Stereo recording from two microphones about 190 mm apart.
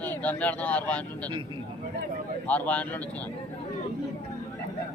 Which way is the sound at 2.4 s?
5° left (ahead or behind).